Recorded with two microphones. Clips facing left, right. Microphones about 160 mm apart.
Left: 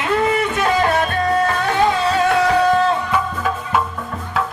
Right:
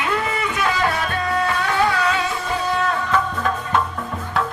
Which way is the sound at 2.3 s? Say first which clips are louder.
Left 10 dB; 90° left.